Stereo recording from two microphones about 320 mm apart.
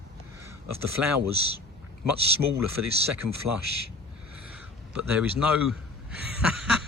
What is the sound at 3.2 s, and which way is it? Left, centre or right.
Speech, right.